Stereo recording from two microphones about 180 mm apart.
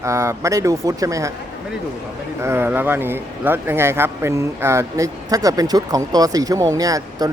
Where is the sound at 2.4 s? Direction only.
15° right (ahead or behind).